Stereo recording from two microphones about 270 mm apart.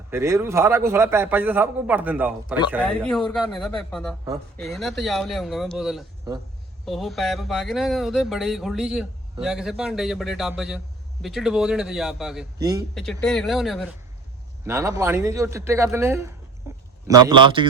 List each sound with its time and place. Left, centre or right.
0.1 s a man's voice: centre
14.7 s a man's voice: centre
16.7 s a sound: centre
17.1 s a man's voice: centre